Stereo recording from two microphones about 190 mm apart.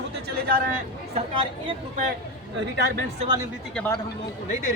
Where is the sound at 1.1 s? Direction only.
30° right (ahead or behind).